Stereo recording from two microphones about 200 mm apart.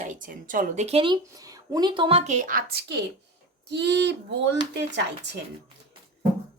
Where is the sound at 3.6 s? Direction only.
60° right (ahead or behind).